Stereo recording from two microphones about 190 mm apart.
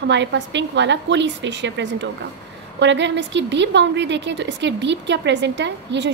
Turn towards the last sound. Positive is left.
turn(degrees=-65)  # may be behind; listen again after turning